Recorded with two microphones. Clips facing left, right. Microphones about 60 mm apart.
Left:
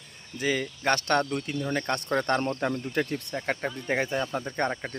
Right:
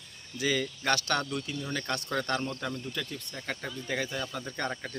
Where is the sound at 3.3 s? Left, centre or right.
Left.